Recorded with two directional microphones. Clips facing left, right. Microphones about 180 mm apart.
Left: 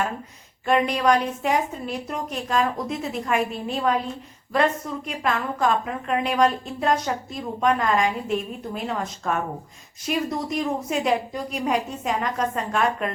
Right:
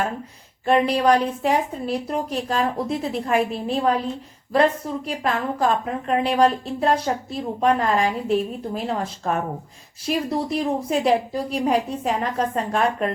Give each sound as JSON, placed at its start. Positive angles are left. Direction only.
{"t": 0.6, "sound": "a woman's voice", "side_deg": -35}